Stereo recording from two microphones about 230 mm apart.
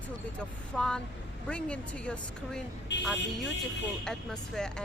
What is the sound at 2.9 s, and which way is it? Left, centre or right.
Speech, left.